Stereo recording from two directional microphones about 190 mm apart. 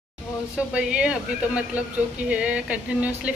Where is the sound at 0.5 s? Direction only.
5° right (ahead or behind).